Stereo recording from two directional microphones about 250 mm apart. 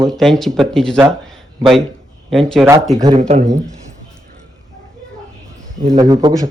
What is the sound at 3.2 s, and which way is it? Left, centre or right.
Speech, right.